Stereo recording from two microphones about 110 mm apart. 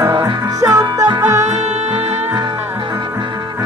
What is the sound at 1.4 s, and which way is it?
Music, 90° right.